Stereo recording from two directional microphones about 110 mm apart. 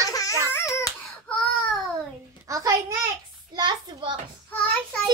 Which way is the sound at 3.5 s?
45° right (ahead or behind).